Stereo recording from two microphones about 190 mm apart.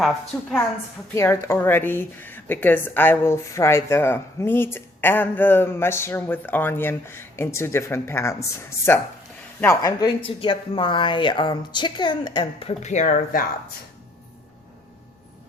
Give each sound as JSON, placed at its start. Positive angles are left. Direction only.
{"t": 1.1, "sound": "speech", "side_deg": 15}